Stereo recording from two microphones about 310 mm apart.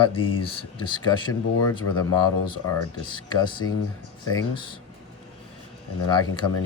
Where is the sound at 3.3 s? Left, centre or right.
Centre.